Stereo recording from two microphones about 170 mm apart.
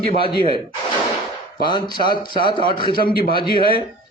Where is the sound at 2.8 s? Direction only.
60° left (ahead or behind).